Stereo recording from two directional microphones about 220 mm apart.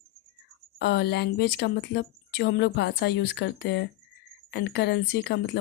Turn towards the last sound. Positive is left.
turn(degrees=50)  # may be behind; listen again after turning